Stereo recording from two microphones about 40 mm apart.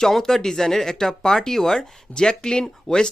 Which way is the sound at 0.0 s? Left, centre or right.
Centre.